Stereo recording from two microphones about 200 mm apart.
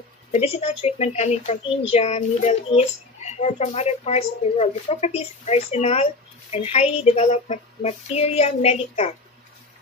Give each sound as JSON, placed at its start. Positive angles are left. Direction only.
{"t": 0.3, "sound": "a child's voice", "side_deg": 30}